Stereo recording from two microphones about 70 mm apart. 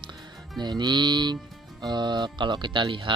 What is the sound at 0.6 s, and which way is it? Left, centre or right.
Music, right.